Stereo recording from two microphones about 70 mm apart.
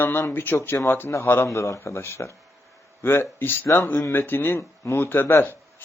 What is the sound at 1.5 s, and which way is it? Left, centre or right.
Speech, left.